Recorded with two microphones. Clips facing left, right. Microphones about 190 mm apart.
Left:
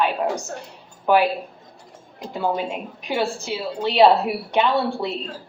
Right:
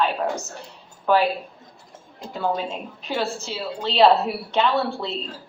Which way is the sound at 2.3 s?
15° left (ahead or behind).